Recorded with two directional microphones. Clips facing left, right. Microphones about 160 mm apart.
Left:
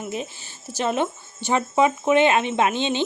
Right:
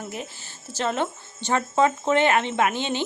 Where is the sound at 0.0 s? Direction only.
20° left (ahead or behind).